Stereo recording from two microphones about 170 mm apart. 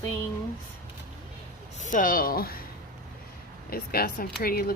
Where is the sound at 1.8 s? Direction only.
50° left (ahead or behind).